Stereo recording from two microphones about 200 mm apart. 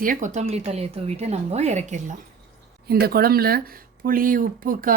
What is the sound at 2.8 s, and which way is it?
Speech, 50° right (ahead or behind).